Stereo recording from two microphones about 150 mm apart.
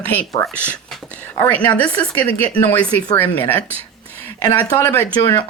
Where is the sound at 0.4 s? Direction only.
15° left (ahead or behind).